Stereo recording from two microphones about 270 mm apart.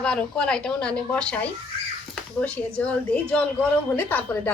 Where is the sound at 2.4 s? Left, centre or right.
Centre.